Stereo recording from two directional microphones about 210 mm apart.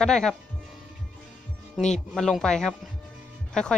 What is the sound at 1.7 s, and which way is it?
Speech, centre (ahead or behind).